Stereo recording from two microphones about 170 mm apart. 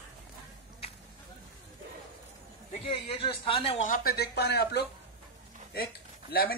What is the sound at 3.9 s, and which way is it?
Speech, 65° left (ahead or behind).